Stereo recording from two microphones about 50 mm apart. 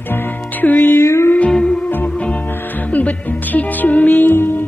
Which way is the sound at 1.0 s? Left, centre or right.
Left.